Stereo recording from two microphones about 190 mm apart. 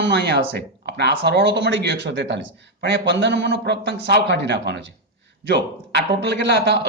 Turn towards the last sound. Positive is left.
turn(degrees=-60)  # may be behind; listen again after turning